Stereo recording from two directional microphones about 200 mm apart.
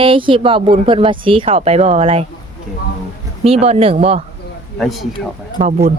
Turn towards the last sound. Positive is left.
turn(degrees=-30)  # may be behind; listen again after turning